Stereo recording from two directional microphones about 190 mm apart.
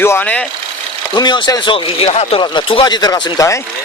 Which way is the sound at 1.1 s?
25° left (ahead or behind).